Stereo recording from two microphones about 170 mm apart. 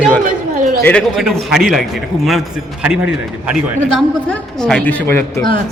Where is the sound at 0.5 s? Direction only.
55° right (ahead or behind).